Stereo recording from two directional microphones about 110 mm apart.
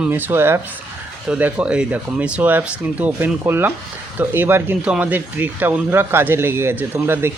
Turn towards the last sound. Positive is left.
turn(degrees=-20)  # may be behind; listen again after turning